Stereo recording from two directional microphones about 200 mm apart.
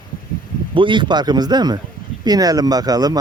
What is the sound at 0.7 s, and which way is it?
Speech, 25° right (ahead or behind).